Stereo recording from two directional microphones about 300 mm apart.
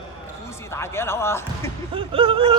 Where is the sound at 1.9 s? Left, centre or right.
Centre.